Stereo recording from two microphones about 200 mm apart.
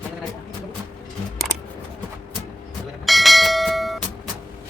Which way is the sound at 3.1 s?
Centre (ahead or behind).